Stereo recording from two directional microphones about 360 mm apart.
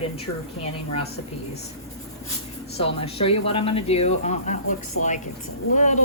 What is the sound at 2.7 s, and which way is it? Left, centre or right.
Speech, centre.